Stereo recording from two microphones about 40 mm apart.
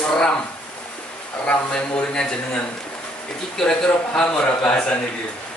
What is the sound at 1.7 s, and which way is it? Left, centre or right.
A man's voice, centre.